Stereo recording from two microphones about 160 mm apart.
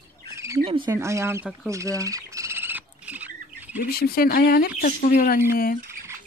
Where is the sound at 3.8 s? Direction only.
75° left (ahead or behind).